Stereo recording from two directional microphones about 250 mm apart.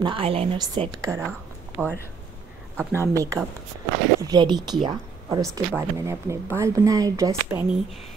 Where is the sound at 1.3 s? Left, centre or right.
Centre.